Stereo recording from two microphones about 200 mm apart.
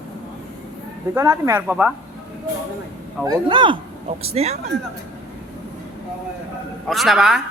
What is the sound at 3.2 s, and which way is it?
Speech, 25° right (ahead or behind).